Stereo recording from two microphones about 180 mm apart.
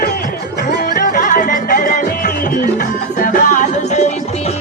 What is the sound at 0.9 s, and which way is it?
Music, 50° left (ahead or behind).